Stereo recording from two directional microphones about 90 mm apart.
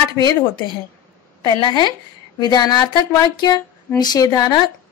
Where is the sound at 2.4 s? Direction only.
50° left (ahead or behind).